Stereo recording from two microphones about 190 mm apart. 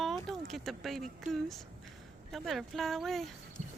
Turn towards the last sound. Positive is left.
turn(degrees=0)  # may be behind; listen again after turning